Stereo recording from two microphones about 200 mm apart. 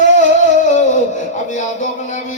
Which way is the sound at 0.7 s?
35° left (ahead or behind).